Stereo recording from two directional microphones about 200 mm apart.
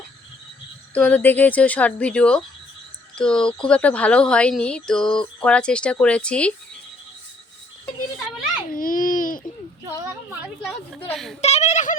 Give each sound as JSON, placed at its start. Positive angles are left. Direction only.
{"t": 0.9, "sound": "a woman's voice", "side_deg": 10}
{"t": 8.7, "sound": "babbling", "side_deg": 45}
{"t": 9.8, "sound": "a sound", "side_deg": -15}
{"t": 11.1, "sound": "speech", "side_deg": 0}
{"t": 11.3, "sound": "speech", "side_deg": 35}